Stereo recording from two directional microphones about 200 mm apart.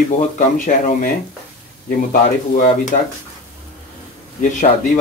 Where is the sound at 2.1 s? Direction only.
35° left (ahead or behind).